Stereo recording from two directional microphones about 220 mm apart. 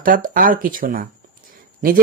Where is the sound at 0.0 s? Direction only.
40° right (ahead or behind).